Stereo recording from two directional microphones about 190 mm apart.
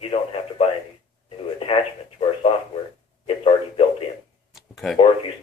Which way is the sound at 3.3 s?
30° left (ahead or behind).